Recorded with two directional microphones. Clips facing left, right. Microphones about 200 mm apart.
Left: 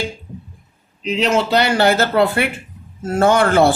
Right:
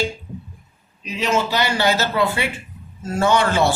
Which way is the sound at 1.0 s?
70° left (ahead or behind).